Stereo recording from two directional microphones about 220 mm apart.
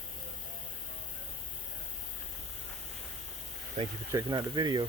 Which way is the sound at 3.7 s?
15° right (ahead or behind).